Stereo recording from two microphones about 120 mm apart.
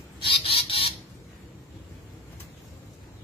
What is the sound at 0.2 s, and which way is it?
Fowl, 50° left (ahead or behind).